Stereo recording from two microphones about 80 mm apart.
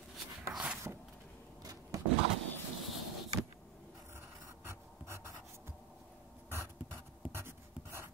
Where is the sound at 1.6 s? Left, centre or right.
Right.